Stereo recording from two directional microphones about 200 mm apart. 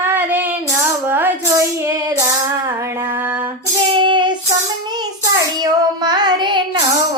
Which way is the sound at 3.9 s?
25° right (ahead or behind).